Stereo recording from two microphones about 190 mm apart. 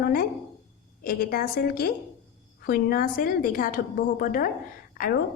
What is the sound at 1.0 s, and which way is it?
A woman's voice, 50° left (ahead or behind).